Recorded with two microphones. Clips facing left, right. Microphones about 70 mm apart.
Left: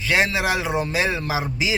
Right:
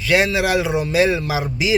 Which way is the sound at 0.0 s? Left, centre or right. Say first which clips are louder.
Right 3 dB; left.